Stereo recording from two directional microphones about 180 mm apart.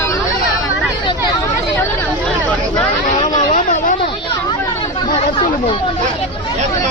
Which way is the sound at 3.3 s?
45° left (ahead or behind).